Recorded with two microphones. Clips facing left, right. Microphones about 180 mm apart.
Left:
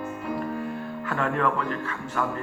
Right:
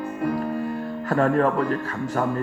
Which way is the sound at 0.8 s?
40° right (ahead or behind).